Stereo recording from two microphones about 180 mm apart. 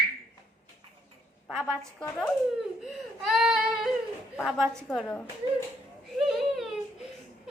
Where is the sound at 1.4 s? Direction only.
5° left (ahead or behind).